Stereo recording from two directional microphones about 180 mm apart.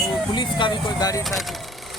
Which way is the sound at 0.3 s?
25° left (ahead or behind).